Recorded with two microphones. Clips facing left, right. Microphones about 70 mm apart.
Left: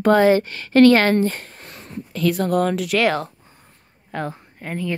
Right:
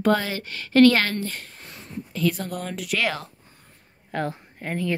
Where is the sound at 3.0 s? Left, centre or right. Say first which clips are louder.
Left 7 dB; left.